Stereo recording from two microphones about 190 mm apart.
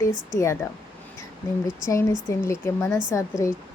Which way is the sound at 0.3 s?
15° left (ahead or behind).